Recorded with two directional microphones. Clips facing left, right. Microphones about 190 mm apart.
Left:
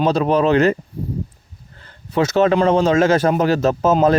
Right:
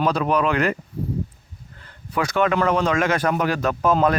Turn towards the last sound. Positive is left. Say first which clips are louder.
# left 4 dB
turn(degrees=25)  # may be behind; listen again after turning